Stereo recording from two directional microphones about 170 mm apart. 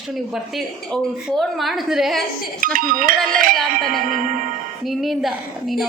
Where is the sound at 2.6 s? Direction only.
50° right (ahead or behind).